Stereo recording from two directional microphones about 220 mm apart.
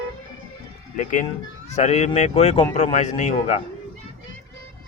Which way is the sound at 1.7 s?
30° left (ahead or behind).